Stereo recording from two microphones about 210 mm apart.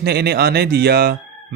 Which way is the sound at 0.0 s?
50° right (ahead or behind).